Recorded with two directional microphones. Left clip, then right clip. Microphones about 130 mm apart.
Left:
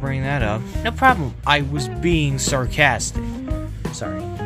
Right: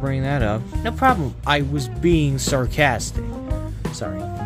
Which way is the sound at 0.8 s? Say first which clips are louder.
Left 2 dB; 10° right (ahead or behind).